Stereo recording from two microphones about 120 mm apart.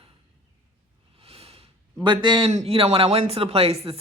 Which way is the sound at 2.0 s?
40° right (ahead or behind).